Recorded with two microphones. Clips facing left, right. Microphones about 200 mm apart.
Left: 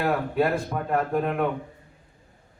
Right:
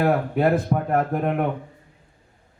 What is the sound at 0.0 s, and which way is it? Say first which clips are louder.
A man's voice: right 4 dB; 50° right (ahead or behind).